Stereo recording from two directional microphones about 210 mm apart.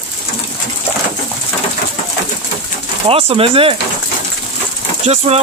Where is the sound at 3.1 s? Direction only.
25° right (ahead or behind).